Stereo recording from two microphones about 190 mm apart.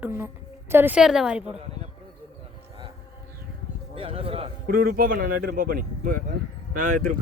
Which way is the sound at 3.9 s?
30° right (ahead or behind).